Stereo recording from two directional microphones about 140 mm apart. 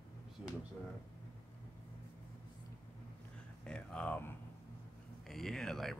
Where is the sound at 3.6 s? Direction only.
5° left (ahead or behind).